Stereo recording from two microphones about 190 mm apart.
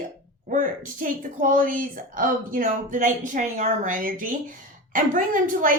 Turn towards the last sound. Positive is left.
turn(degrees=-45)  # may be behind; listen again after turning